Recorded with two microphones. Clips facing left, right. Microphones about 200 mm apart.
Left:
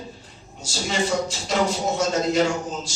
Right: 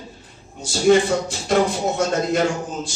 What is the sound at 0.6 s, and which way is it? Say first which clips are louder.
Speech: right 10 dB; 55° right (ahead or behind).